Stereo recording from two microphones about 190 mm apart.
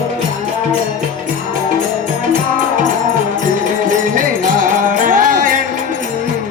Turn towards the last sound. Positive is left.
turn(degrees=-45)  # may be behind; listen again after turning